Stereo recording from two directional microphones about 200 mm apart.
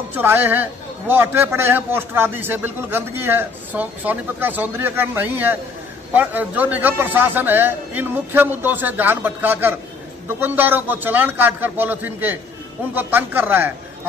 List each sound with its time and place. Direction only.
0.1 s a man's voice: 10° right (ahead or behind)